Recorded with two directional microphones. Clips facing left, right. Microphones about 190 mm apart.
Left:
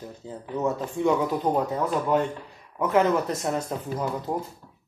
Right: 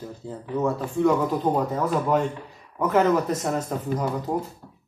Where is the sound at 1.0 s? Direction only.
5° left (ahead or behind).